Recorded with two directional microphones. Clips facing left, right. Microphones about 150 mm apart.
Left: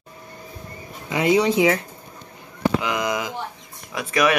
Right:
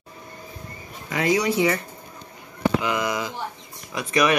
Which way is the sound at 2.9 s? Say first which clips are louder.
Left 1 dB; 15° left (ahead or behind).